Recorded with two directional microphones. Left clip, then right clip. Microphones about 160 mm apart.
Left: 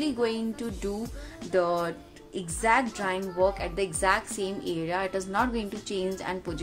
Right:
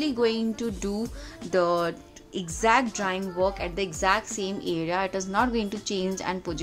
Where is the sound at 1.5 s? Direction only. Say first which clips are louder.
Right 2 dB; 25° right (ahead or behind).